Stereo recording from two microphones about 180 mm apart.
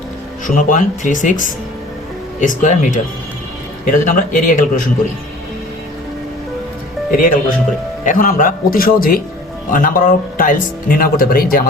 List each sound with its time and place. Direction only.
0.4 s speech: 45° left (ahead or behind)
7.1 s speech: 50° left (ahead or behind)